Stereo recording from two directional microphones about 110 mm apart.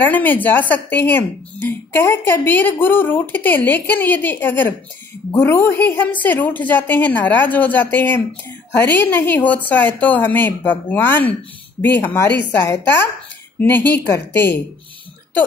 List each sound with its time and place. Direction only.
0.0 s a woman's voice: 15° left (ahead or behind)